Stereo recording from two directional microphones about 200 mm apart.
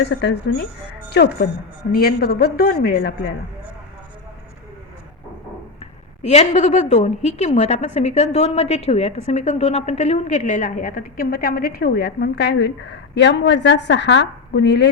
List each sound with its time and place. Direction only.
0.0 s a woman's voice: 60° left (ahead or behind)
5.8 s a woman's voice: 30° left (ahead or behind); by 14.8 s 60° left (ahead or behind)